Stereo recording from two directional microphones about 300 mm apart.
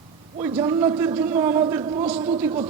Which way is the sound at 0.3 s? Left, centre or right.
Centre.